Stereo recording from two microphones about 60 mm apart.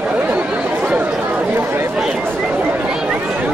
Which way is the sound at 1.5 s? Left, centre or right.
Right.